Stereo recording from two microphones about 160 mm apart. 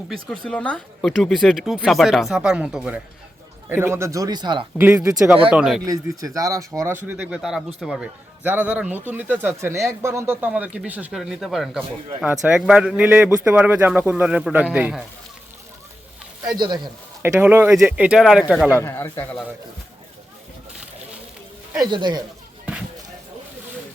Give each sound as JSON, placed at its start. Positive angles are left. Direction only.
{"t": 0.1, "sound": "speech", "side_deg": 5}
{"t": 4.8, "sound": "a man's voice", "side_deg": -10}
{"t": 5.8, "sound": "a man's voice", "side_deg": -20}
{"t": 16.6, "sound": "speech", "side_deg": -25}
{"t": 17.2, "sound": "a man's voice", "side_deg": -15}
{"t": 18.8, "sound": "speech", "side_deg": 15}
{"t": 21.8, "sound": "speech", "side_deg": -30}